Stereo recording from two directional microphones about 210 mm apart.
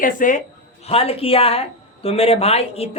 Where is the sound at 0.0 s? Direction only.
40° left (ahead or behind).